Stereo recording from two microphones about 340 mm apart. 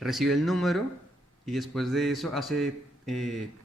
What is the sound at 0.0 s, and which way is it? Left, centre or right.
A man's voice, centre.